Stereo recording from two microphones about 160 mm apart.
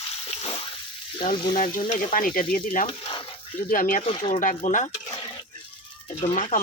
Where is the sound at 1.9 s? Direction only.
50° left (ahead or behind).